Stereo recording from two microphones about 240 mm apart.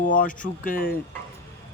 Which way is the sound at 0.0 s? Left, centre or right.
Left.